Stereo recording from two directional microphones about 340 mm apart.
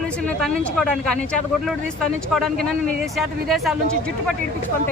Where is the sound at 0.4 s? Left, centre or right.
Centre.